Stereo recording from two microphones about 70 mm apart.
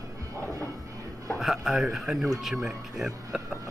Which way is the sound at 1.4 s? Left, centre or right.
Centre.